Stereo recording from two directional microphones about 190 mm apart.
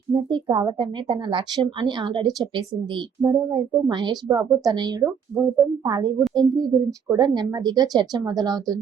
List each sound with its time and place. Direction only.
0.1 s a woman's voice: 25° right (ahead or behind)